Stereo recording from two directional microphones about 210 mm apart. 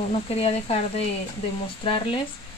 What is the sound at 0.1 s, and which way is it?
Speech, 30° left (ahead or behind).